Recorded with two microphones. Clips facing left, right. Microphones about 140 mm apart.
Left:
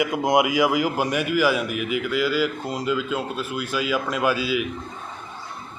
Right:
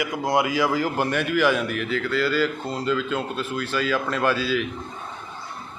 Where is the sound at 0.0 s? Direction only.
20° left (ahead or behind).